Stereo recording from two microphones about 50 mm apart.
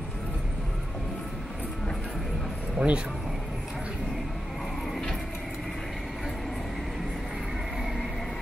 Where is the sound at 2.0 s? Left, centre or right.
Centre.